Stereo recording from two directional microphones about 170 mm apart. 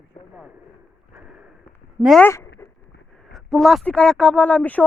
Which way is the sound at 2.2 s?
15° left (ahead or behind).